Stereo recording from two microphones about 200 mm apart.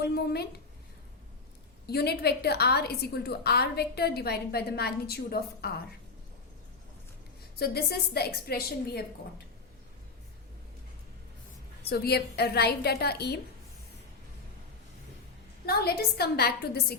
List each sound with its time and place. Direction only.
0.0 s a woman's voice: 55° left (ahead or behind)
1.9 s a woman's voice: 55° left (ahead or behind)
7.6 s a woman's voice: 50° left (ahead or behind)
11.9 s a woman's voice: 55° left (ahead or behind)
15.6 s a woman's voice: 50° left (ahead or behind)